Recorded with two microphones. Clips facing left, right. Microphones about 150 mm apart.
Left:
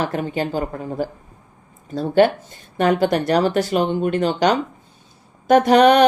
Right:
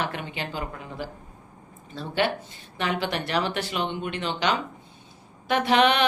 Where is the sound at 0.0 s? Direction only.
40° left (ahead or behind).